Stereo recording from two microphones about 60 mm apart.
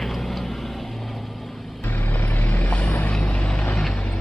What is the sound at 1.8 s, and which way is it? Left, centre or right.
Vehicle, left.